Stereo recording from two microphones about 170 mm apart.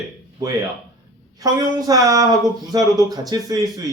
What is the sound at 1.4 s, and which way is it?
Speech, 20° right (ahead or behind).